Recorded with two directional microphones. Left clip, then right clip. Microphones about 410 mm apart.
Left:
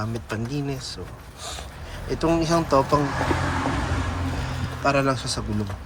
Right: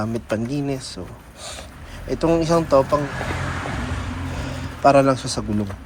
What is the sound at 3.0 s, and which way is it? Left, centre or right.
Speech, left.